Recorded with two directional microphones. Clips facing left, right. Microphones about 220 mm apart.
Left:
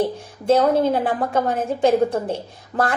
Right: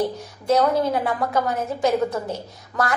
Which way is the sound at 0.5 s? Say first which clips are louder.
Left 3 dB; 25° left (ahead or behind).